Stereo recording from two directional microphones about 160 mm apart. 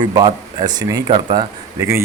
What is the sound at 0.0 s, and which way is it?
Speech, 25° right (ahead or behind).